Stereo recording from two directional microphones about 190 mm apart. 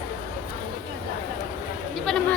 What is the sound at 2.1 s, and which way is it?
Speech, centre (ahead or behind).